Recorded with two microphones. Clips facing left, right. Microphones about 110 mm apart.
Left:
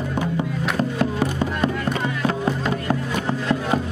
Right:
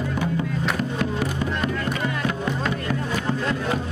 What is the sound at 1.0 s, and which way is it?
Music, 30° left (ahead or behind).